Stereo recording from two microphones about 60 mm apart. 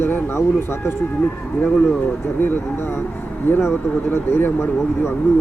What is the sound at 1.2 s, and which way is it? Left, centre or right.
Speech, left.